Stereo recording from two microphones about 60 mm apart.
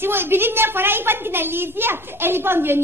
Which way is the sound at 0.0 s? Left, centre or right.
Right.